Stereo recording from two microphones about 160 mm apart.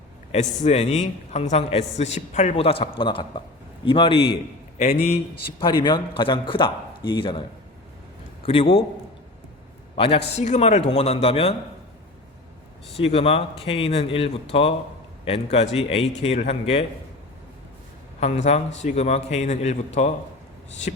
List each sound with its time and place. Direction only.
0.3 s a man's voice: 40° left (ahead or behind)
8.4 s a man's voice: 35° left (ahead or behind)
9.9 s a man's voice: 40° left (ahead or behind)
13.0 s a man's voice: 35° left (ahead or behind)
18.2 s a man's voice: 45° left (ahead or behind)